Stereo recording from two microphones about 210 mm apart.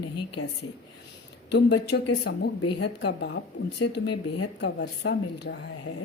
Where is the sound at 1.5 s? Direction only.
55° left (ahead or behind).